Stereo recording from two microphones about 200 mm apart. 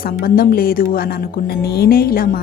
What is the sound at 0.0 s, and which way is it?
A woman's voice, 45° left (ahead or behind).